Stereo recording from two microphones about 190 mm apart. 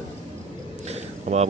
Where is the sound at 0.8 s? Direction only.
35° right (ahead or behind).